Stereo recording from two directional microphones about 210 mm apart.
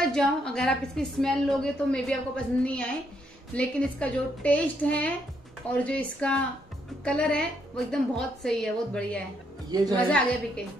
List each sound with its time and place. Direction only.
0.0 s a woman's voice: 5° left (ahead or behind)
9.7 s a woman's voice: 20° right (ahead or behind)
9.9 s a woman's voice: 5° left (ahead or behind)